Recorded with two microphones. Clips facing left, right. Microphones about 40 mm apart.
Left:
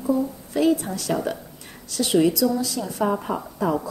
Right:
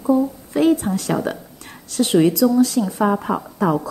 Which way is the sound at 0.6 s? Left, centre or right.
Right.